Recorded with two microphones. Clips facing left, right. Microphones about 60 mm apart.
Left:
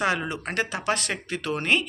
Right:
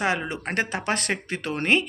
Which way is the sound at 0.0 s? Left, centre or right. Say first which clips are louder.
Even; right.